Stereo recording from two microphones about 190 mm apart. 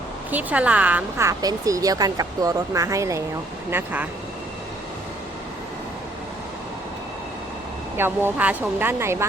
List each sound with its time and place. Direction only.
0.3 s speech: 10° right (ahead or behind)
7.9 s speech: 10° right (ahead or behind)